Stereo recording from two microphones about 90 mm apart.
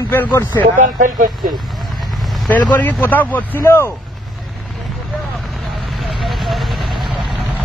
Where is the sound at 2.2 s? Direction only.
Centre (ahead or behind).